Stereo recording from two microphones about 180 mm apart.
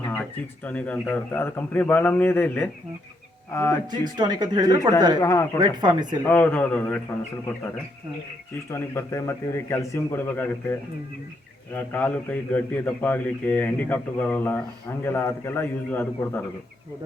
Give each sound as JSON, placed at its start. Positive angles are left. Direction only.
{"t": 0.1, "sound": "a man's voice", "side_deg": 10}
{"t": 3.9, "sound": "speech", "side_deg": -25}
{"t": 5.2, "sound": "a man's voice", "side_deg": 20}
{"t": 5.5, "sound": "speech", "side_deg": -25}
{"t": 6.2, "sound": "a man's voice", "side_deg": 10}
{"t": 8.7, "sound": "a man's voice", "side_deg": 15}